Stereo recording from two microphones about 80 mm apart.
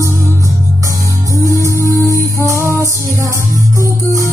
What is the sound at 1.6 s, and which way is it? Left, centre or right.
Music, right.